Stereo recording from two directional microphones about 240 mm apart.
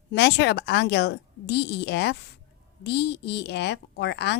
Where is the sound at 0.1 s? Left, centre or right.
Left.